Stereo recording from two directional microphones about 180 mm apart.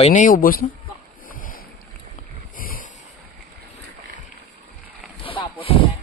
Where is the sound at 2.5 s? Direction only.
50° left (ahead or behind).